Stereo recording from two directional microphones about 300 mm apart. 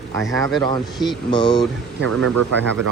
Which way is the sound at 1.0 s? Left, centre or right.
Centre.